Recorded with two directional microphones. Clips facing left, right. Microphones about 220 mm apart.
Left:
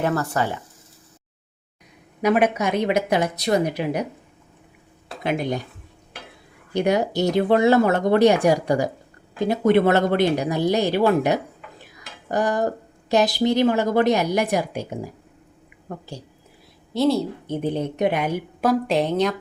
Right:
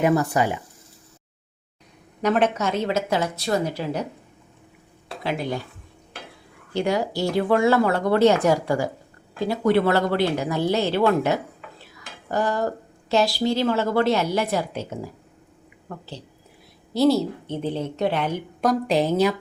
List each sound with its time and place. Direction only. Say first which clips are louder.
0.0 s speech: right 3 dB; 15° right (ahead or behind)
2.2 s speech: left 2 dB; 10° left (ahead or behind)
5.2 s speech: left 3 dB; 20° left (ahead or behind)
6.7 s speech: left 3 dB; 20° left (ahead or behind)
16.9 s a woman's voice: right 1 dB; centre (ahead or behind)
17.4 s speech: left 2 dB; 15° left (ahead or behind); by 19.4 s 5° right (ahead or behind)